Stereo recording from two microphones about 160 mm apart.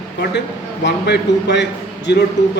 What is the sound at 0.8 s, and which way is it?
A man's voice, 90° left.